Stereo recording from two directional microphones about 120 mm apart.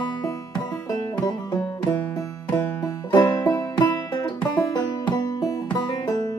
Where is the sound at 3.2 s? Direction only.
25° left (ahead or behind).